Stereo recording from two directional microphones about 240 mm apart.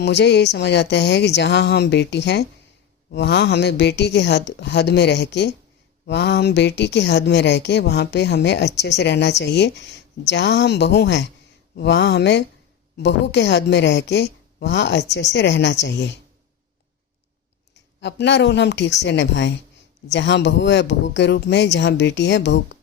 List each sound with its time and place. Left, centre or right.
0.0 s speech: left
18.0 s speech: left